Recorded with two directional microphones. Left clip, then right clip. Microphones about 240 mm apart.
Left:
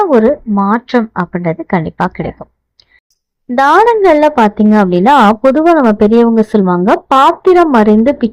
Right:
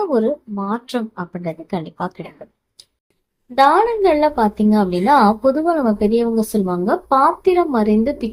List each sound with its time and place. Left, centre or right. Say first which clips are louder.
0.0 s a woman's voice: left 9 dB; left
3.6 s a woman's voice: left 6 dB; left